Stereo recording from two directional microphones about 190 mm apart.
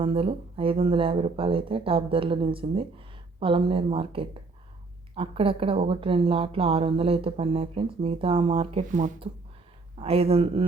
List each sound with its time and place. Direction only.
0.0 s speech: 30° right (ahead or behind)
8.9 s speech: 40° right (ahead or behind)
10.0 s speech: 30° right (ahead or behind)